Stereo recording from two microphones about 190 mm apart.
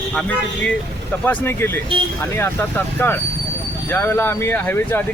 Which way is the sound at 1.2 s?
10° left (ahead or behind).